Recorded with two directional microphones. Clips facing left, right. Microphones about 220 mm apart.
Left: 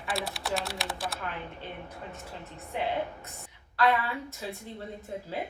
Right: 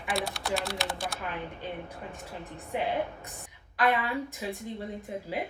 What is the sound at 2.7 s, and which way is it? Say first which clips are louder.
A woman's voice: right 1 dB; 15° right (ahead or behind).